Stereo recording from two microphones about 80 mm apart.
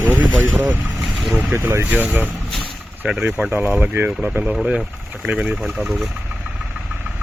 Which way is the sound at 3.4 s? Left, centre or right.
Right.